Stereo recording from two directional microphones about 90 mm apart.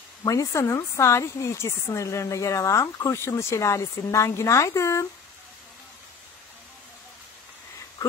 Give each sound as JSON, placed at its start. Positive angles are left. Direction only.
{"t": 0.2, "sound": "speech", "side_deg": 40}